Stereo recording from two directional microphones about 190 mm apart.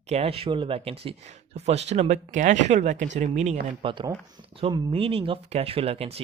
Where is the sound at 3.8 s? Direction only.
25° right (ahead or behind).